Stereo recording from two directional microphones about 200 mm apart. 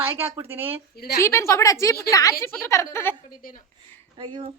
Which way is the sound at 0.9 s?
50° left (ahead or behind).